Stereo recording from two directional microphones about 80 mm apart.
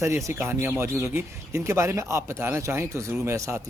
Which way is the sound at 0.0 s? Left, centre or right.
Right.